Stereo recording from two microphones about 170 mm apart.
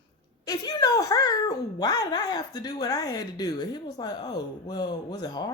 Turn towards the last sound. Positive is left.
turn(degrees=25)  # may be behind; listen again after turning